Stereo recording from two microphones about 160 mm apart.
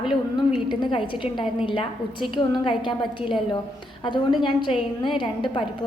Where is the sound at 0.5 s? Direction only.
30° left (ahead or behind).